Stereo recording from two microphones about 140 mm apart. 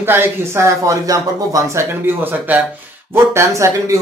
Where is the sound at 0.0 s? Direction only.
15° right (ahead or behind).